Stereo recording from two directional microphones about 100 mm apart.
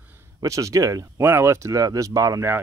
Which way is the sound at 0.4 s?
35° right (ahead or behind).